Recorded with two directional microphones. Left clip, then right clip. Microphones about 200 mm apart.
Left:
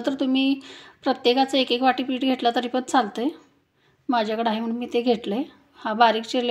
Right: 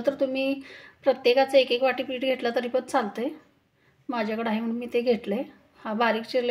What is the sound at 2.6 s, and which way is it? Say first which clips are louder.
A woman's voice: left 3 dB; 30° left (ahead or behind).